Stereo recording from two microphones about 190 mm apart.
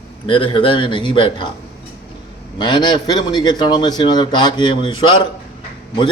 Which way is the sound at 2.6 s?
25° left (ahead or behind).